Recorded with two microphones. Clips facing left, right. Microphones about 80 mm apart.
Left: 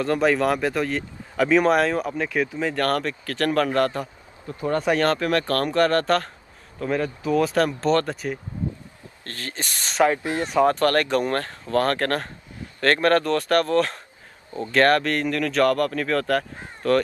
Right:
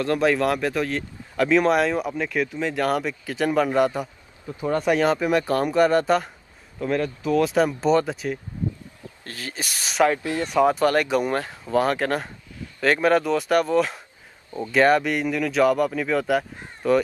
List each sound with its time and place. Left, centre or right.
0.0 s speech: centre
6.8 s speech: centre
10.1 s speech: left
10.5 s speech: centre